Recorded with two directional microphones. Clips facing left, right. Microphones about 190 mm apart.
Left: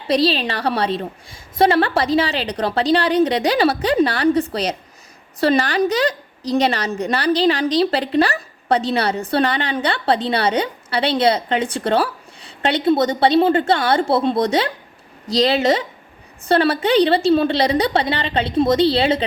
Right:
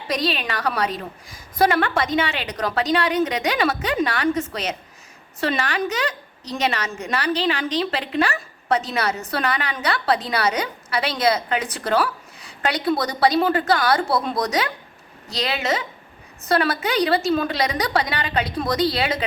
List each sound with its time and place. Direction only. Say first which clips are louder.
0.1 s a woman's voice: left 7 dB; 30° left (ahead or behind)